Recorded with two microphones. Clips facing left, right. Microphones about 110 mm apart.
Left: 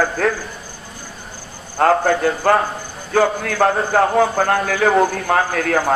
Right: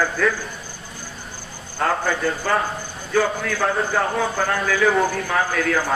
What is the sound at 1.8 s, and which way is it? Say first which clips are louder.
Speech: left 7 dB; 65° left (ahead or behind).